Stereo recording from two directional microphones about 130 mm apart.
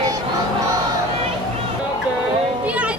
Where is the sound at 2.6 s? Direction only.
10° right (ahead or behind).